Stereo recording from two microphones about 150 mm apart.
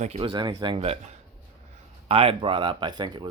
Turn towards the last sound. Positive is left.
turn(degrees=-30)  # may be behind; listen again after turning